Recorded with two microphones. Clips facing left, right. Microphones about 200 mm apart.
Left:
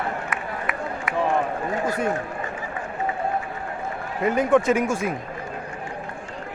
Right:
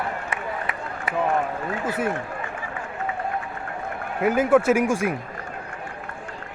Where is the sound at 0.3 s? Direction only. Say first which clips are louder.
Even; 30° right (ahead or behind).